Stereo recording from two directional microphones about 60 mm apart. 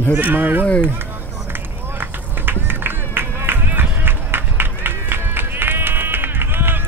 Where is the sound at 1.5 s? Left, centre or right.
Right.